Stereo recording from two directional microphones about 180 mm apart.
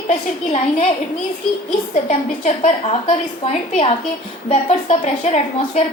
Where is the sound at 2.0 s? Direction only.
40° left (ahead or behind).